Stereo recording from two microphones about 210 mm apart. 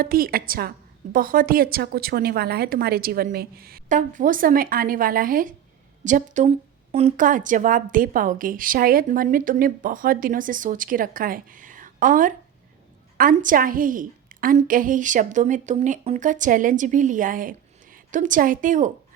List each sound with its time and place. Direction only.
0.0 s a woman's voice: 45° right (ahead or behind)